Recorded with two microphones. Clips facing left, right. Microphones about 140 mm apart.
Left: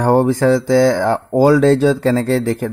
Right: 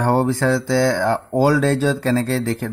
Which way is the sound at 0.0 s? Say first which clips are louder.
Left 5 dB; 15° left (ahead or behind).